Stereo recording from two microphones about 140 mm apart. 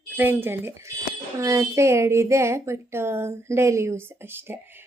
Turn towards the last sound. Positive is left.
turn(degrees=-15)  # may be behind; listen again after turning